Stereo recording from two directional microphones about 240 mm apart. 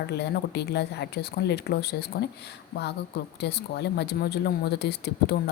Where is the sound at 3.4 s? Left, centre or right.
Left.